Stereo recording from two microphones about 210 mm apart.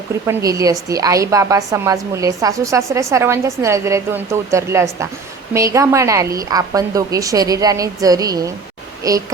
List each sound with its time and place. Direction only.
0.3 s a woman's voice: 15° right (ahead or behind)